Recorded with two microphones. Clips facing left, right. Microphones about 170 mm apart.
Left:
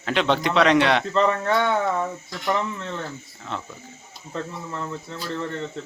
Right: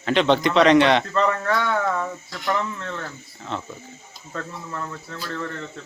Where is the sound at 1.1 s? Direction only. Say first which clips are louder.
Left 1 dB; 20° left (ahead or behind).